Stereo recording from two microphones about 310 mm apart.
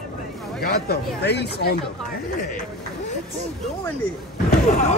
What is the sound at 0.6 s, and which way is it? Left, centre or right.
Speech, left.